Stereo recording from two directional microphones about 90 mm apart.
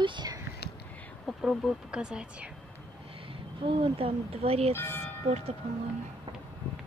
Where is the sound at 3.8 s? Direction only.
85° right.